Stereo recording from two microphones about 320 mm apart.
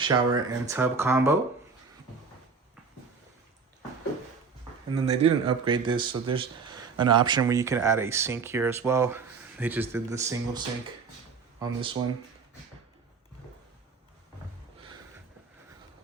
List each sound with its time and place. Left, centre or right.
0.0 s speech: centre
4.9 s speech: centre
11.6 s speech: centre